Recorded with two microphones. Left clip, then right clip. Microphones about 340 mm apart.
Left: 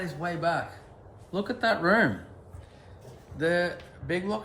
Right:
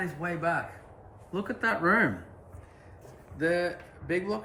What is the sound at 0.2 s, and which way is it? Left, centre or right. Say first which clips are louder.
Speech: left 3 dB; centre.